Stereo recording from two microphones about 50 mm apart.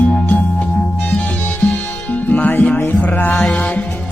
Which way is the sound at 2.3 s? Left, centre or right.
Left.